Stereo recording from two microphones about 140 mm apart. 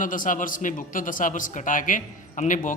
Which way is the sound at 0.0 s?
70° left (ahead or behind).